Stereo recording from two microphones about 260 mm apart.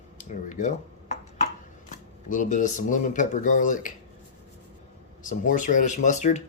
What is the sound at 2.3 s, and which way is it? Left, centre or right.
Speech, left.